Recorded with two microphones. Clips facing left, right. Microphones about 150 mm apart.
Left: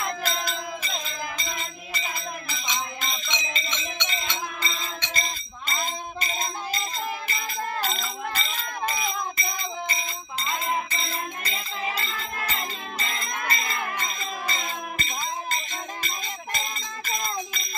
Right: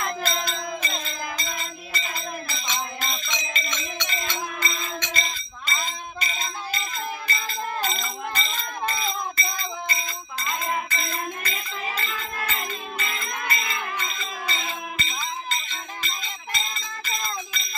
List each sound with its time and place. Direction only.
0.0 s music: 10° left (ahead or behind); by 5.1 s 30° left (ahead or behind)
5.1 s music: 50° left (ahead or behind)
7.2 s music: 20° left (ahead or behind)
7.8 s a sound: 5° left (ahead or behind)
9.6 s music: 20° left (ahead or behind); by 17.6 s 45° left (ahead or behind)